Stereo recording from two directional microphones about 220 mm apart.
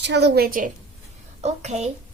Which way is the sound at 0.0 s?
50° right (ahead or behind).